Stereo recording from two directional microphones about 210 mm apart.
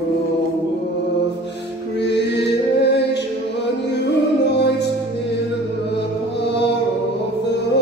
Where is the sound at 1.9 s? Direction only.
55° left (ahead or behind).